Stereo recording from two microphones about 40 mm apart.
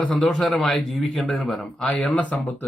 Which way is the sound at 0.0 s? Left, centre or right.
Left.